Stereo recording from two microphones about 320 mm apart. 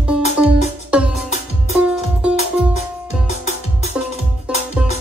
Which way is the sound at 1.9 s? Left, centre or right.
Centre.